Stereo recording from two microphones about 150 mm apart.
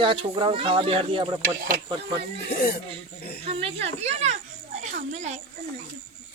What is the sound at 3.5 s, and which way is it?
Speech, 40° right (ahead or behind).